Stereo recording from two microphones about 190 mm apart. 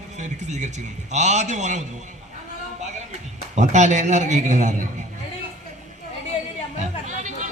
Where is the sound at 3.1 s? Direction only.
35° right (ahead or behind).